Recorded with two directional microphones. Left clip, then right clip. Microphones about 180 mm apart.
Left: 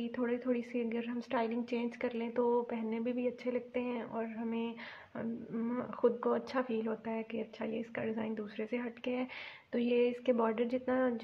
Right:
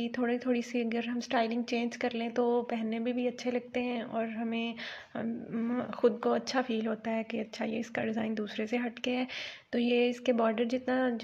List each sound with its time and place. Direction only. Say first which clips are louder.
0.0 s a woman's voice: right 4 dB; 20° right (ahead or behind)